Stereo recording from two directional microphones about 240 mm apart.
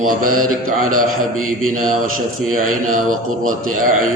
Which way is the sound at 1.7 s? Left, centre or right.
Right.